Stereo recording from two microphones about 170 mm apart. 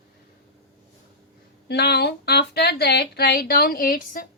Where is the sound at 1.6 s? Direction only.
75° left (ahead or behind); by 4.3 s 55° left (ahead or behind).